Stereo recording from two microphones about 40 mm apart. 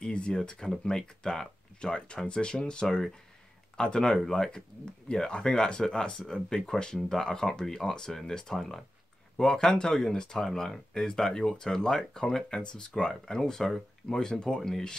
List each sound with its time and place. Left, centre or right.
0.0 s speech: left